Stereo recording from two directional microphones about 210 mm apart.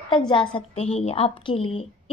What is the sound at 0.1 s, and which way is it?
Speech, 25° left (ahead or behind).